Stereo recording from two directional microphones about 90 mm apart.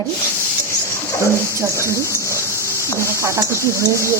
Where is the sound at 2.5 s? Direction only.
30° left (ahead or behind).